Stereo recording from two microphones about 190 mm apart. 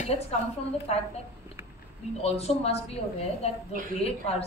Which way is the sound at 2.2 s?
30° left (ahead or behind).